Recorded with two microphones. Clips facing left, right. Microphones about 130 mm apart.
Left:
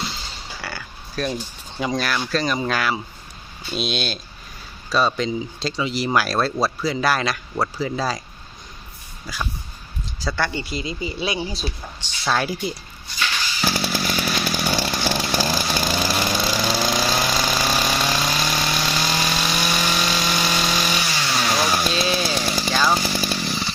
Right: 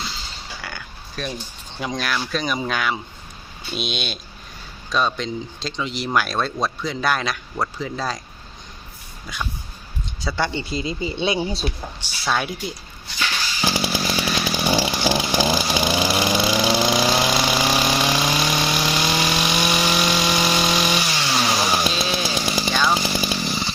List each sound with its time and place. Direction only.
0.6 s a sound: 5° left (ahead or behind)
1.8 s speech: centre (ahead or behind)
9.2 s speech: 5° left (ahead or behind)
10.3 s speech: 20° right (ahead or behind)
12.2 s speech: centre (ahead or behind)
13.6 s chainsaw: 15° right (ahead or behind)
19.4 s wood: 15° right (ahead or behind)
19.8 s power tool: 5° right (ahead or behind)
20.3 s power tool: 20° right (ahead or behind)
20.9 s chainsaw: 10° right (ahead or behind)
23.0 s chainsaw: 10° right (ahead or behind)